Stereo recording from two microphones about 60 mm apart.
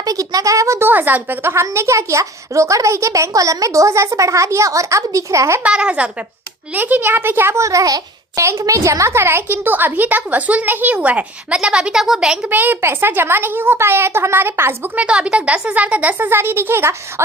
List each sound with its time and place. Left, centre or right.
0.0 s speech: right
0.8 s a woman's voice: right
5.6 s speech: centre
6.7 s a woman's voice: right
7.6 s a child's voice: right
8.4 s a woman's voice: right; by 12.5 s centre
12.5 s a woman's voice: right
14.9 s speech: centre; by 17.2 s right